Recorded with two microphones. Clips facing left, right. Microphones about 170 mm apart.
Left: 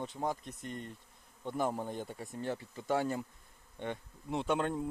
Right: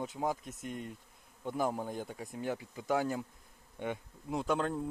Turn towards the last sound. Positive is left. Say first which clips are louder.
# even
turn(degrees=0)  # may be behind; listen again after turning